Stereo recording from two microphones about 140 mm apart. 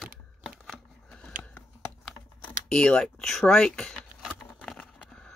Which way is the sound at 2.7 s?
5° left (ahead or behind).